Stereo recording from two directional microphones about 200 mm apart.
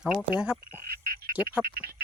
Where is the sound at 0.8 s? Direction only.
45° right (ahead or behind).